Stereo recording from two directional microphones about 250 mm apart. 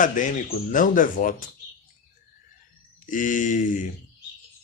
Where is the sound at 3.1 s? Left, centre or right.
Left.